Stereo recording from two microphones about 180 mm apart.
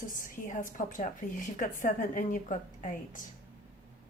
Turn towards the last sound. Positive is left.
turn(degrees=45)  # may be behind; listen again after turning